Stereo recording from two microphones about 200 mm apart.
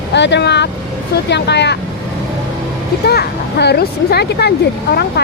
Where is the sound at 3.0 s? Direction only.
50° left (ahead or behind).